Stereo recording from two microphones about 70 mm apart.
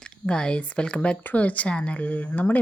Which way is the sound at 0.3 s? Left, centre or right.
Centre.